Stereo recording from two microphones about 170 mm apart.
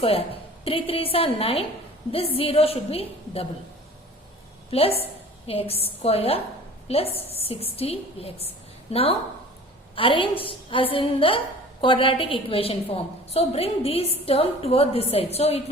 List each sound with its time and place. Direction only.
0.0 s a woman's voice: 35° left (ahead or behind)
4.7 s a woman's voice: 35° left (ahead or behind)